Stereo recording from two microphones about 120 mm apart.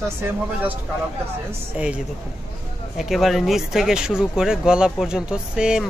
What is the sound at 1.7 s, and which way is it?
Speech, 10° right (ahead or behind).